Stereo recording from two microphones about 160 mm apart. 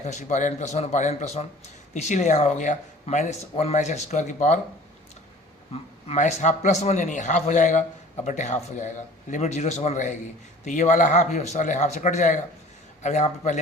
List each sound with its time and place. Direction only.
0.0 s speech: 45° left (ahead or behind)
5.7 s speech: 40° left (ahead or behind)